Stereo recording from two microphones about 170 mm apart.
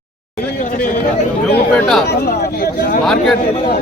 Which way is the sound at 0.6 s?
55° left (ahead or behind).